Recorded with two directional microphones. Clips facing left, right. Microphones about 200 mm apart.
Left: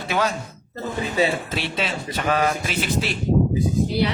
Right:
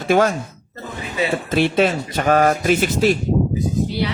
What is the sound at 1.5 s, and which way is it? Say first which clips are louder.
Speech: right 10 dB; 50° right (ahead or behind).